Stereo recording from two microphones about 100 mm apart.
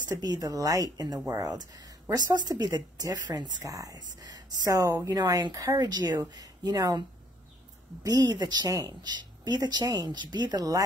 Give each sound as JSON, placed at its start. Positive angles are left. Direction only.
{"t": 0.1, "sound": "speech", "side_deg": -40}